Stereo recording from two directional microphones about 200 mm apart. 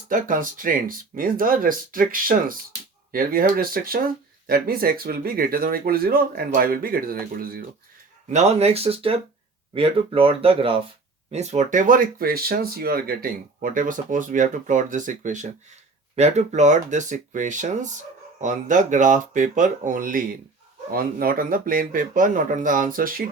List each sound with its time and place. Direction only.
0.1 s speech: 45° right (ahead or behind)
8.3 s speech: 35° right (ahead or behind)